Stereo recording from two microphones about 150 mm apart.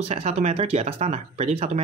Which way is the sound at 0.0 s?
45° right (ahead or behind).